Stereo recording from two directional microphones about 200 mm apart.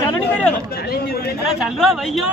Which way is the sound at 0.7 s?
50° left (ahead or behind).